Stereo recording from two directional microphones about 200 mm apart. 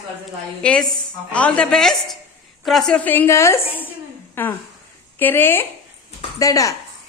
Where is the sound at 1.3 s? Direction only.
5° left (ahead or behind).